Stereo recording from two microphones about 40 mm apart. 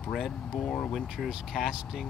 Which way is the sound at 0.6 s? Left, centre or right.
Centre.